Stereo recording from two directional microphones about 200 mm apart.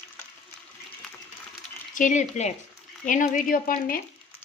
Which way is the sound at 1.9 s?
40° left (ahead or behind).